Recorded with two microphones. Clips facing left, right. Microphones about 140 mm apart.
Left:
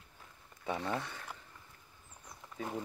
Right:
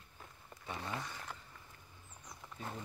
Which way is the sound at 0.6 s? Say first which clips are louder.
Left 7 dB; 85° left.